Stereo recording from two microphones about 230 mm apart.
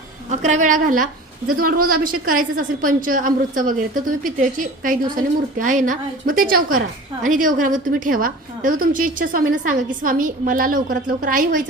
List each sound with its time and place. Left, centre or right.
0.3 s a woman's voice: right